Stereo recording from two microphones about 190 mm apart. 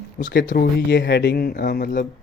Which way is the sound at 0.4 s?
50° left (ahead or behind).